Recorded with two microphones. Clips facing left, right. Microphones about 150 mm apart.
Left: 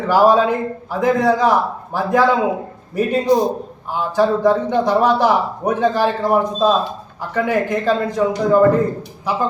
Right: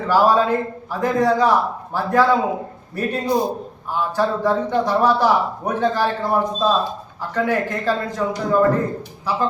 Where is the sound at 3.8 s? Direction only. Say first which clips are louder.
Left 4 dB; 15° left (ahead or behind).